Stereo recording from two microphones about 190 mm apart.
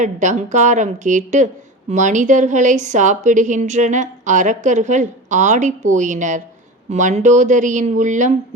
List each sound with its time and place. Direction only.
0.0 s a woman's voice: 40° right (ahead or behind)